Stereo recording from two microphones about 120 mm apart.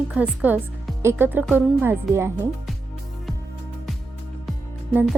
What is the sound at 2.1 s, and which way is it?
Speech, 20° right (ahead or behind).